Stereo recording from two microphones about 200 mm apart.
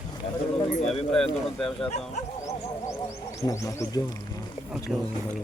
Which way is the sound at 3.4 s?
15° left (ahead or behind).